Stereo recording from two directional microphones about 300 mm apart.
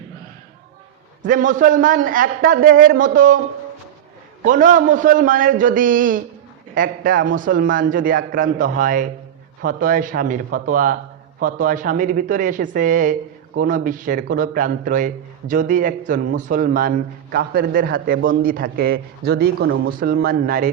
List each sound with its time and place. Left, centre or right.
1.2 s a man's voice: right
4.4 s a man's voice: right